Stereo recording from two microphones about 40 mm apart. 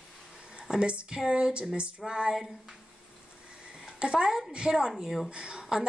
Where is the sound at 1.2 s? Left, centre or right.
Centre.